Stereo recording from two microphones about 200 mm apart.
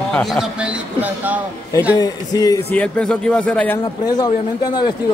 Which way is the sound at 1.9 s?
20° left (ahead or behind).